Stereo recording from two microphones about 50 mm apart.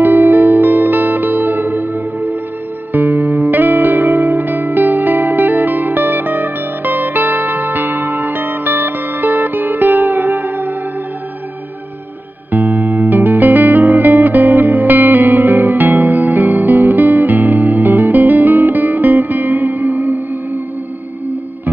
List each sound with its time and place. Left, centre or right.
0.0 s music: right
12.4 s music: right